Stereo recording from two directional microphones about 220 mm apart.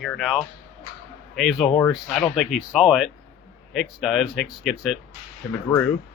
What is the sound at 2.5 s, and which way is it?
Speech, centre (ahead or behind).